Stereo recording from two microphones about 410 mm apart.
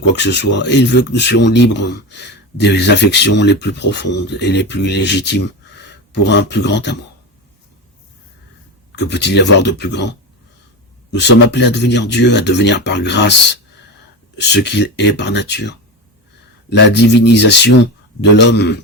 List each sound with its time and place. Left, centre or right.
0.2 s speech: left
9.0 s speech: left